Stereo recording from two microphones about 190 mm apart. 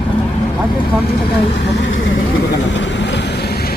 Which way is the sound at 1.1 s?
60° left (ahead or behind).